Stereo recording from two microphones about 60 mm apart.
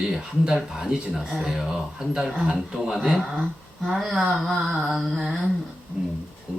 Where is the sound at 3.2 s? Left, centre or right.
Centre.